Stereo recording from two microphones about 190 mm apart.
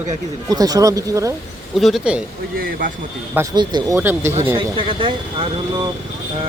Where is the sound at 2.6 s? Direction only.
50° right (ahead or behind).